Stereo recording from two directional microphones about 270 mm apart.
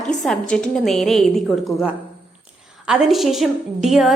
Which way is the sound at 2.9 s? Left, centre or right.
Centre.